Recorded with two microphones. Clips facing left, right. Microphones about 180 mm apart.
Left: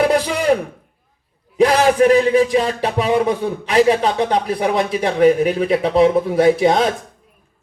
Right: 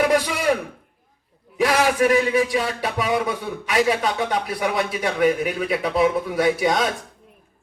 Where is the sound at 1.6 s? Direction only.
35° left (ahead or behind).